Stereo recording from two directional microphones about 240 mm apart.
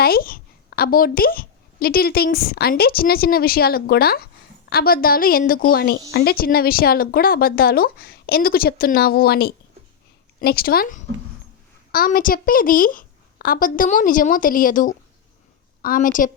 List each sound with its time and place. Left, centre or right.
0.0 s a woman's voice: left